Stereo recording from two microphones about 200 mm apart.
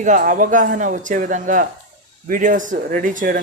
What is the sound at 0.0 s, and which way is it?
A woman's voice, 40° right (ahead or behind).